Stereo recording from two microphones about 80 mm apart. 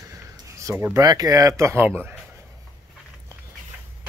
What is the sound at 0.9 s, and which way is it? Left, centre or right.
Speech, right.